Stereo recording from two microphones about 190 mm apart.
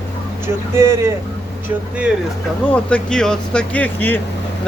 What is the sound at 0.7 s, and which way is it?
Speech, 15° right (ahead or behind).